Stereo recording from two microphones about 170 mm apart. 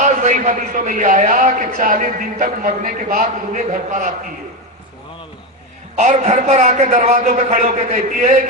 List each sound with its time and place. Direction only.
0.0 s a man's voice: 45° right (ahead or behind)
6.0 s a man's voice: 45° right (ahead or behind)